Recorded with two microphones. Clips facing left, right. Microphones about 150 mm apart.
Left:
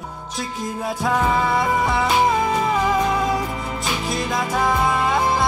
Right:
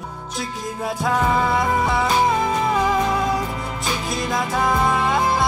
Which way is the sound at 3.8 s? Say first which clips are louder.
Left 1 dB; centre (ahead or behind).